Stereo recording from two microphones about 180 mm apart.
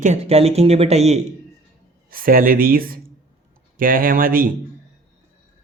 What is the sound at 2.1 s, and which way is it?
Speech, 55° right (ahead or behind).